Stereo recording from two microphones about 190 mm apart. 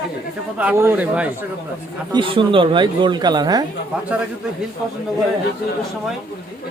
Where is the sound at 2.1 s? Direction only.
25° right (ahead or behind).